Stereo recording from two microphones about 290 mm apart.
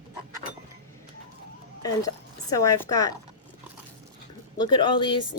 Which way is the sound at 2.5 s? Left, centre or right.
Centre.